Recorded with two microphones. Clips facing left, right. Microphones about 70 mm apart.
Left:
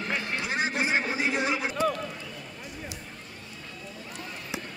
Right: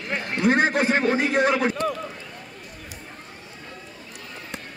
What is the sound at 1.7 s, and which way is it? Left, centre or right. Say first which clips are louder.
Run: right 1 dB; centre.